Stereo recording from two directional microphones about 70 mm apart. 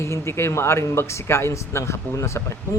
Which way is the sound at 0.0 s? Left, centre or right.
Left.